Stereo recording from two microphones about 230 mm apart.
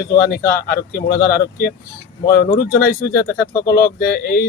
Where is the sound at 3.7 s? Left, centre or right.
Left.